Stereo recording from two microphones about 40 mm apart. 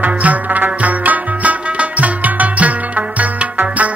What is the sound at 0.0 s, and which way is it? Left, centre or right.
Music, right.